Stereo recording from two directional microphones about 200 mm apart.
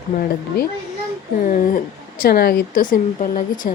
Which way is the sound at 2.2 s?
50° left (ahead or behind).